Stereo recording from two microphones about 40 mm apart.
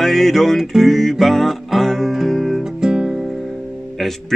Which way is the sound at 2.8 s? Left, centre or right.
Right.